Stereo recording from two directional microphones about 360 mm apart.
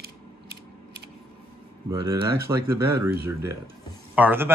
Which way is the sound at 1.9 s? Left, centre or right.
Centre.